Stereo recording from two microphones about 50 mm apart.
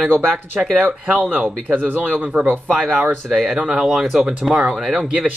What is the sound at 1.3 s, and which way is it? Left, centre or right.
A man's voice, right.